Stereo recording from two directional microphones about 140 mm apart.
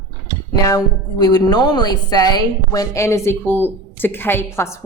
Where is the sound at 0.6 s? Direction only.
25° left (ahead or behind).